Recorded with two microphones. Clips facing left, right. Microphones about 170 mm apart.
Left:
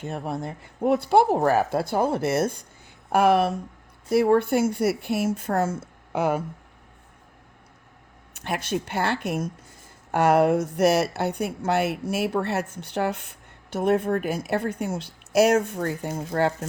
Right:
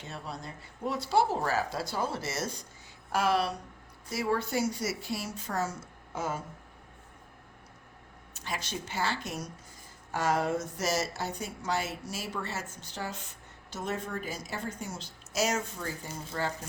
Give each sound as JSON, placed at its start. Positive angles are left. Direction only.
{"t": 0.0, "sound": "a woman's voice", "side_deg": 55}
{"t": 8.3, "sound": "a woman's voice", "side_deg": 60}